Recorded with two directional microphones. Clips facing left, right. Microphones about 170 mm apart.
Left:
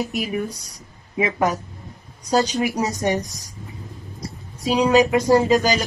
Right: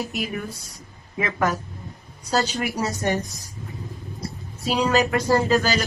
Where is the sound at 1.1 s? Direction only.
20° left (ahead or behind).